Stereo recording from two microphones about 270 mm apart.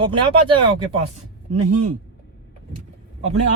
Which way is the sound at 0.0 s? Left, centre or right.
Centre.